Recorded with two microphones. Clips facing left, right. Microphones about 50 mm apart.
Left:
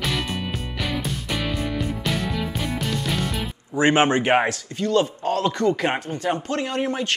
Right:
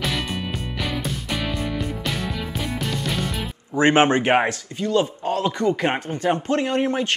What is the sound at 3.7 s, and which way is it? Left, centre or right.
Speech, right.